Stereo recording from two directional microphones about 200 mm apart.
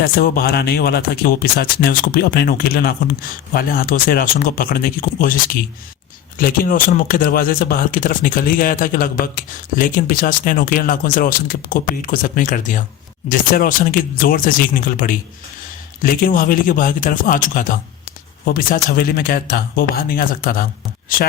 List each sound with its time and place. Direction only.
0.0 s speech: 50° left (ahead or behind)